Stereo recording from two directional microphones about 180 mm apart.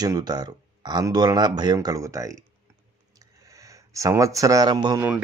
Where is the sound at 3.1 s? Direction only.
20° right (ahead or behind).